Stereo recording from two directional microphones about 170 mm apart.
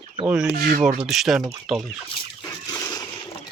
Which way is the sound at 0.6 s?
55° right (ahead or behind).